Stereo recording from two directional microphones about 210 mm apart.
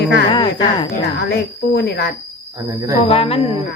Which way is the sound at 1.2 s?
50° left (ahead or behind).